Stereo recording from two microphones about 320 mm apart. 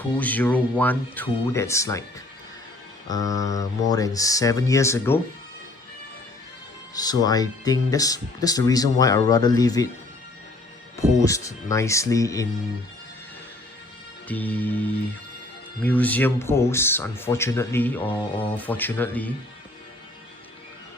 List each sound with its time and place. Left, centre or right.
0.2 s speech: centre
3.1 s speech: centre
6.9 s speech: centre
11.2 s speech: centre
14.3 s speech: centre
18.5 s speech: centre